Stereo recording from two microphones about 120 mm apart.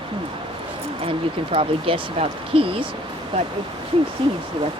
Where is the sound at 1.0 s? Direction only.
50° right (ahead or behind).